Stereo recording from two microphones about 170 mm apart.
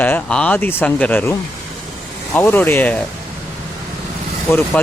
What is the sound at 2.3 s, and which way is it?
Speech, 10° left (ahead or behind).